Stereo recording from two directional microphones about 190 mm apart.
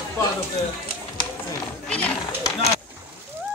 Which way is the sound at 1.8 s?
5° left (ahead or behind).